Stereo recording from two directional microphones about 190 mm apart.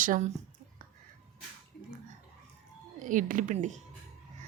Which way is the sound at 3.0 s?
45° right (ahead or behind).